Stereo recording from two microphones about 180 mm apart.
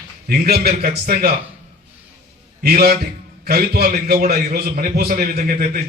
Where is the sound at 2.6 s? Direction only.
55° right (ahead or behind).